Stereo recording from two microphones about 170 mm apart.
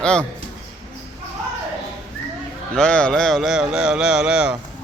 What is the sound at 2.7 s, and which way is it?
Speech, 5° left (ahead or behind).